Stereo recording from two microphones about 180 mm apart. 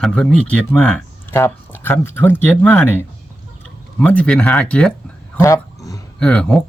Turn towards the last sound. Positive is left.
turn(degrees=5)  # may be behind; listen again after turning